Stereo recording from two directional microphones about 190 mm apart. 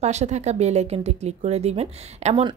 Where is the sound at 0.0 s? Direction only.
35° right (ahead or behind).